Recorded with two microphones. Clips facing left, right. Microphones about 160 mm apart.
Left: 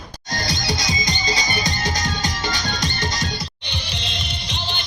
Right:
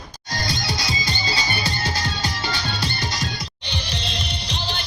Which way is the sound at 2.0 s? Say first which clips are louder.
Left 2 dB; 40° left (ahead or behind).